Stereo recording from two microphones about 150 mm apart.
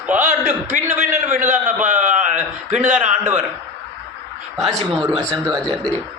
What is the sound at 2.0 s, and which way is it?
Speech, 55° right (ahead or behind).